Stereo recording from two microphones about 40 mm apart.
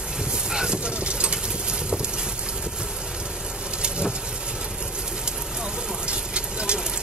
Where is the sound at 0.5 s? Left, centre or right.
Centre.